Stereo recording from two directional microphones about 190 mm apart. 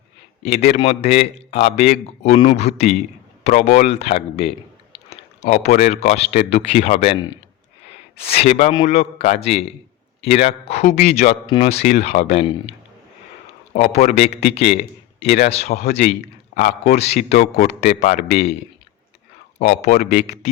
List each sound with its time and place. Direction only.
0.4 s speech: 35° left (ahead or behind)
8.2 s speech: 30° left (ahead or behind)
13.7 s speech: 35° left (ahead or behind)
19.5 s speech: 40° left (ahead or behind)
20.2 s speech: 35° left (ahead or behind)